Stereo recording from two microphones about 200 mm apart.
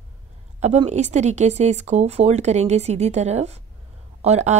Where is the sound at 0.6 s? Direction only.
35° right (ahead or behind).